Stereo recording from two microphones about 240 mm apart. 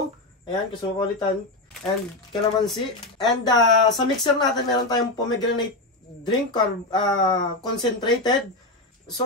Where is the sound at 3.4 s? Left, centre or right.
Centre.